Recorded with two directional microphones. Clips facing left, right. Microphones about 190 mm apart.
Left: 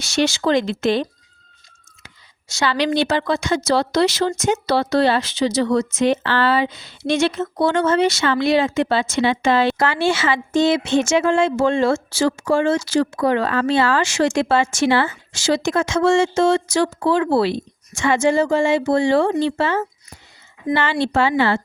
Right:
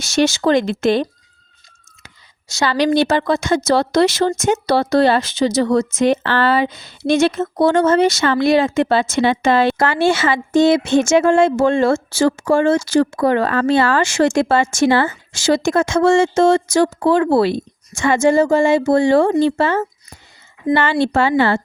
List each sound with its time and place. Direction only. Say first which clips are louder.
0.0 s a woman's voice: right 3 dB; 45° right (ahead or behind)
2.0 s a woman's voice: right 1 dB; 40° right (ahead or behind)